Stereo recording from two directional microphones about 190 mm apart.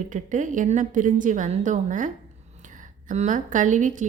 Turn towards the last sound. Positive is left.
turn(degrees=-40)  # may be behind; listen again after turning